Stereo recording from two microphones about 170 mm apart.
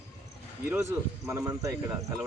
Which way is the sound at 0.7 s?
15° right (ahead or behind).